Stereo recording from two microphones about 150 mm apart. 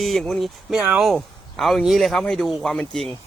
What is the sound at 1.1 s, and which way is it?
Speech, centre (ahead or behind).